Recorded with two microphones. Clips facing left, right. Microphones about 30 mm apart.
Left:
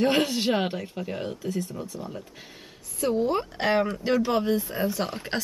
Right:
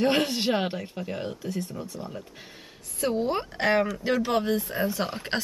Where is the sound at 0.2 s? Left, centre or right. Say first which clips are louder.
Left 1 dB; centre.